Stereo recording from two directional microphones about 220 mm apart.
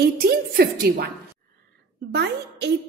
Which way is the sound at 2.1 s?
50° right (ahead or behind).